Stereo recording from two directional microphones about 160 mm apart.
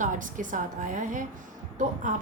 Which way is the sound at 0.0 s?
55° right (ahead or behind).